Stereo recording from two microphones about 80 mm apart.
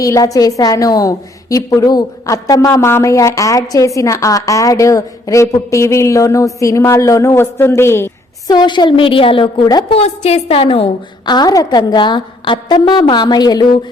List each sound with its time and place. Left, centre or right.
0.0 s a woman's voice: left
2.2 s a woman's voice: left
8.4 s a woman's voice: left
11.3 s a woman's voice: left